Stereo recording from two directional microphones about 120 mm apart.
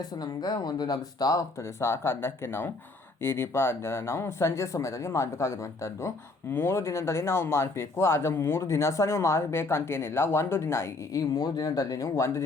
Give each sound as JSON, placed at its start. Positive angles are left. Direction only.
{"t": 0.0, "sound": "speech", "side_deg": 35}